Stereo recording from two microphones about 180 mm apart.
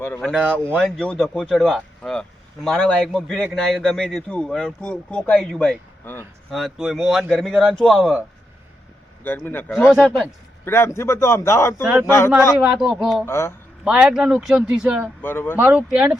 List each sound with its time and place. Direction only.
0.2 s a man's voice: 5° right (ahead or behind)
9.2 s a man's voice: 10° left (ahead or behind)
10.7 s a man's voice: 15° left (ahead or behind)
12.5 s a man's voice: centre (ahead or behind)
13.2 s a man's voice: 15° left (ahead or behind)
13.8 s a man's voice: 5° right (ahead or behind)
15.2 s a man's voice: 10° left (ahead or behind)
15.5 s speech: 10° right (ahead or behind)